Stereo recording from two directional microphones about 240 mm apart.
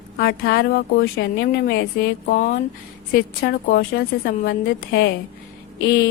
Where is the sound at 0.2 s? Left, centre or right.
Left.